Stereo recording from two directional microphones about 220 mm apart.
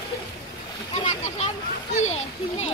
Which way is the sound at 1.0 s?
30° left (ahead or behind).